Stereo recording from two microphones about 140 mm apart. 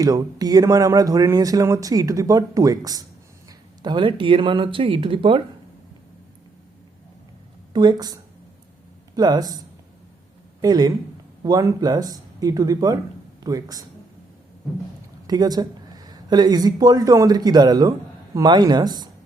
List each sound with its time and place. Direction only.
0.0 s speech: 25° right (ahead or behind)
7.7 s speech: 30° right (ahead or behind)
10.6 s speech: 30° right (ahead or behind)
15.3 s speech: 30° right (ahead or behind)